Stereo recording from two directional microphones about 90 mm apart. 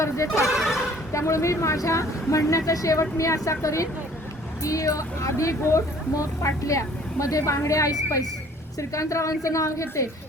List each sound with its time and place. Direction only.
0.4 s speech: centre (ahead or behind)
1.1 s speech: 35° left (ahead or behind)